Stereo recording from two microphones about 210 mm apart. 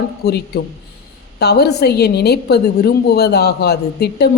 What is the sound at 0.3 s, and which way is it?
A woman's voice, 50° left (ahead or behind).